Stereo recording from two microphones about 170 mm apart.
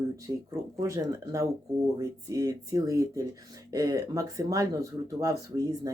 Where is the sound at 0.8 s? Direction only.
20° right (ahead or behind).